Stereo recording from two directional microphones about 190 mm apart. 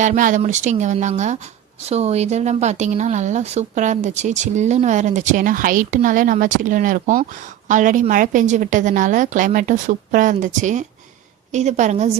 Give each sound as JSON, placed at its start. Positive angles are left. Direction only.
{"t": 0.0, "sound": "a woman's voice", "side_deg": -40}